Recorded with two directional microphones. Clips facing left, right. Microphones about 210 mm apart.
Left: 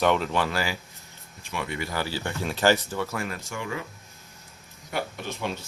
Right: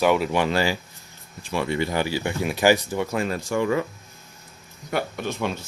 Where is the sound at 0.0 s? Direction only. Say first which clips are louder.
Right 3 dB; 10° right (ahead or behind); by 3.6 s 30° right (ahead or behind).